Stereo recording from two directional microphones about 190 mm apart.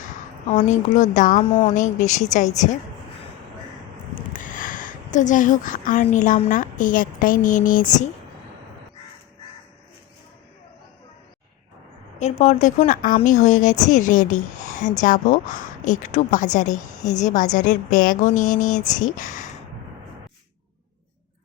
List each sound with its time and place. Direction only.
0.0 s a woman's voice: 40° left (ahead or behind)
4.3 s a sound: 45° left (ahead or behind)
6.1 s a woman's voice: 40° left (ahead or behind)
12.2 s a woman's voice: 40° left (ahead or behind)